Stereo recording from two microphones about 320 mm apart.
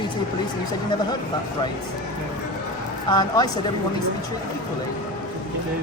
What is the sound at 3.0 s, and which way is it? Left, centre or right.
Speech, centre.